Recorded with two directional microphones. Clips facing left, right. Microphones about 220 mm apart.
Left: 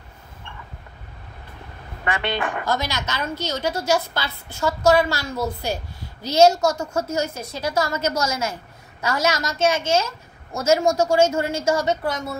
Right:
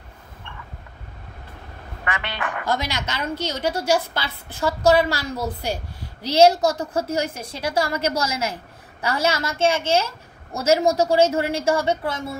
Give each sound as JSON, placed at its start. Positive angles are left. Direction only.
{"t": 2.0, "sound": "a woman's voice", "side_deg": 30}
{"t": 2.6, "sound": "a woman's voice", "side_deg": -30}